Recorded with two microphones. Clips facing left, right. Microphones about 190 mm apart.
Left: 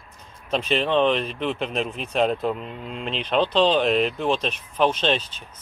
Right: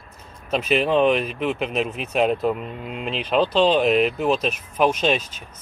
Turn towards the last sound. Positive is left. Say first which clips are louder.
# right 2 dB
turn(degrees=-10)  # may be behind; listen again after turning